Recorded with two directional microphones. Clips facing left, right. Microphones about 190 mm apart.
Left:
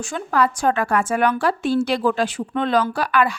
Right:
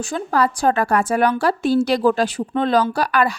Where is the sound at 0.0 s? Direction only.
35° right (ahead or behind).